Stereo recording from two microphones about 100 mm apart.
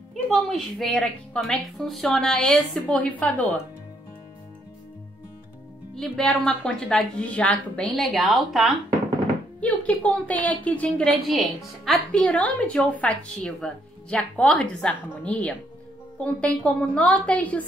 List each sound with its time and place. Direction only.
0.1 s a woman's voice: centre (ahead or behind)
3.0 s a woman's voice: 15° left (ahead or behind)
6.1 s a woman's voice: 10° left (ahead or behind)
7.9 s a woman's voice: centre (ahead or behind)
9.6 s a woman's voice: 15° left (ahead or behind)
11.2 s a woman's voice: centre (ahead or behind)